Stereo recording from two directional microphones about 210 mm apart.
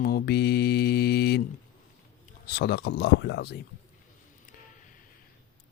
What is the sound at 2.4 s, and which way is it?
Speech, 50° left (ahead or behind).